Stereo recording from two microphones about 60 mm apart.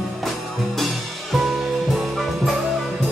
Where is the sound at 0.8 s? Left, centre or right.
Centre.